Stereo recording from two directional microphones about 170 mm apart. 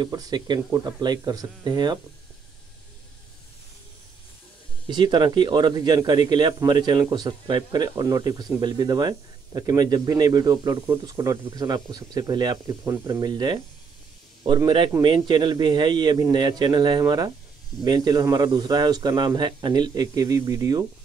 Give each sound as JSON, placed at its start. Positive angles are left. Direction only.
{"t": 0.0, "sound": "a man's voice", "side_deg": -25}
{"t": 4.8, "sound": "a man's voice", "side_deg": -25}
{"t": 15.0, "sound": "a man's voice", "side_deg": -25}